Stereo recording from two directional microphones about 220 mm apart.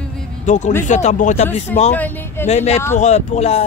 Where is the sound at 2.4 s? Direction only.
30° left (ahead or behind).